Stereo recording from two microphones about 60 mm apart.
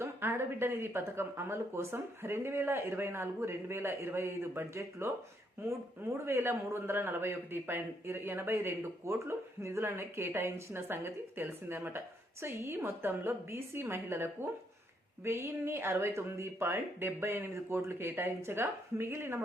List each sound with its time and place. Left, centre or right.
0.0 s a man's voice: right
6.2 s a man's voice: right